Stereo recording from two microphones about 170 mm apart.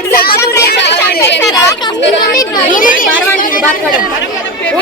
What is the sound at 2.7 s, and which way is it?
Speech, 55° left (ahead or behind).